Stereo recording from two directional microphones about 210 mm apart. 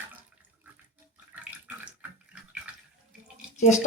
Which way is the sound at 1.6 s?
5° right (ahead or behind).